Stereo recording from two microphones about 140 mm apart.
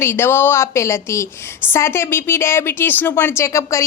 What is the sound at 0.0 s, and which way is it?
A woman's voice, 15° left (ahead or behind).